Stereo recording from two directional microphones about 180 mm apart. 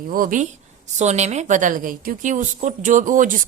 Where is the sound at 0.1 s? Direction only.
50° right (ahead or behind).